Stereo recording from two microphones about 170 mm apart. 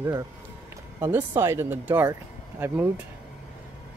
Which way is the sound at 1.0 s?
15° right (ahead or behind).